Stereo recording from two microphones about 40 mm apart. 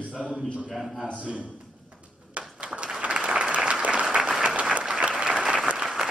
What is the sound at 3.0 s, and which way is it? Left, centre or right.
Applause, right.